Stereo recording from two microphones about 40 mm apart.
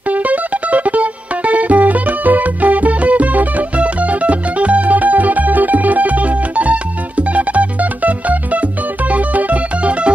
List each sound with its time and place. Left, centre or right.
0.1 s music: right